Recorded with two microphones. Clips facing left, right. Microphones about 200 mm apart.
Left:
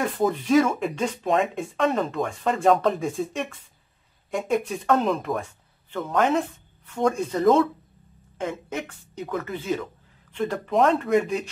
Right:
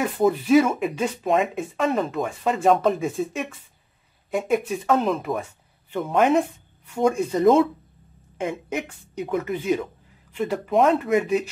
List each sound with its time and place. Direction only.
0.0 s speech: 5° right (ahead or behind)